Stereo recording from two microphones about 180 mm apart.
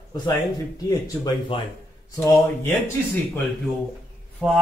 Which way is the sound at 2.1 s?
15° left (ahead or behind).